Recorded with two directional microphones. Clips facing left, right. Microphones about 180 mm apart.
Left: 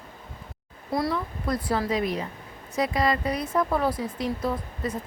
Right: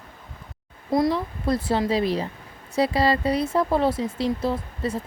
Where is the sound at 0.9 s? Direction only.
25° right (ahead or behind).